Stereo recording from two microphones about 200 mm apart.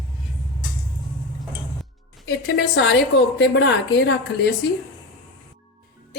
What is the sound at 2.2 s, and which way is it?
A woman's voice, 60° left (ahead or behind).